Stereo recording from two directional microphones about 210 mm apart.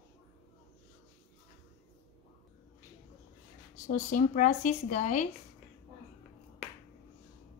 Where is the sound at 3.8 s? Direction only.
35° left (ahead or behind).